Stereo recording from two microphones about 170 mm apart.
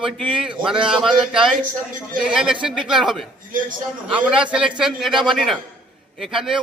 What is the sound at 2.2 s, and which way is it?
A man's voice, 5° right (ahead or behind).